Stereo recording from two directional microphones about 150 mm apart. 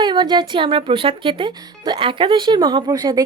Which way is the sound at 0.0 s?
30° right (ahead or behind).